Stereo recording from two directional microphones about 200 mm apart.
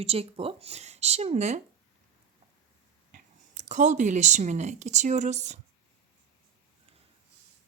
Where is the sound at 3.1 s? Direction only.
35° right (ahead or behind).